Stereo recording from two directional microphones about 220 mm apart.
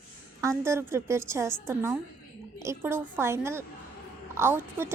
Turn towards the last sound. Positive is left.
turn(degrees=-10)  # may be behind; listen again after turning